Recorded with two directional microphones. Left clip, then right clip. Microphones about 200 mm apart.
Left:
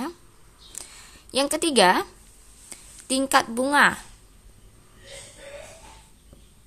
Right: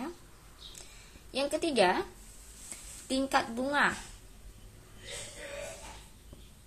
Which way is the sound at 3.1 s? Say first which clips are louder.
Left 8 dB; 35° left (ahead or behind).